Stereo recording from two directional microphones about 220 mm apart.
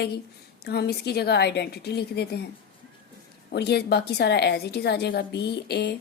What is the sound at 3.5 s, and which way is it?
A woman's voice, 50° left (ahead or behind).